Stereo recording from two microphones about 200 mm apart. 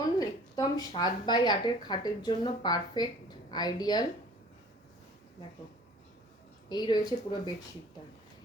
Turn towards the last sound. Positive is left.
turn(degrees=20)  # may be behind; listen again after turning